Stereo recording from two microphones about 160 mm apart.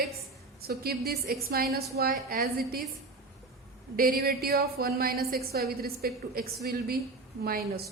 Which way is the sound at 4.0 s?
70° right (ahead or behind).